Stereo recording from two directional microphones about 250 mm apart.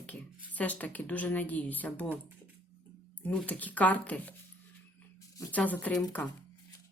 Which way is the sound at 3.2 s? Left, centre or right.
Centre.